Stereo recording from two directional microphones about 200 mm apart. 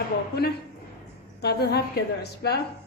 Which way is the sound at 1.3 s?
55° left (ahead or behind).